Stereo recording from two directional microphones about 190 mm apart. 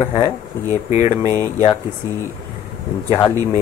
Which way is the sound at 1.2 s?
15° right (ahead or behind).